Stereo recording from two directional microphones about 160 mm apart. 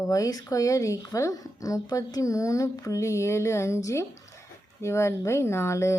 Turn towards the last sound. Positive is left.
turn(degrees=15)  # may be behind; listen again after turning